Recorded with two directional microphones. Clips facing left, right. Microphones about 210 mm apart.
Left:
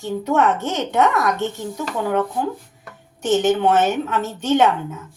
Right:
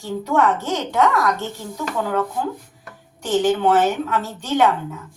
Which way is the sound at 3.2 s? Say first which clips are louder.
Left 1 dB; 25° left (ahead or behind).